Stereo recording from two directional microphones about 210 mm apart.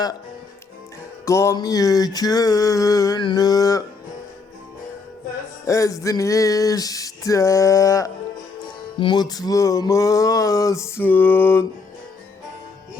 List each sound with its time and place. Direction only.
1.2 s music: 15° left (ahead or behind)
5.6 s music: 15° left (ahead or behind)